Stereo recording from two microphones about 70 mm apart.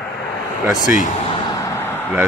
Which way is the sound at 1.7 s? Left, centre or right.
Left.